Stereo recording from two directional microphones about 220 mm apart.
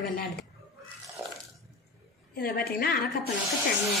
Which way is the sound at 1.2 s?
10° right (ahead or behind).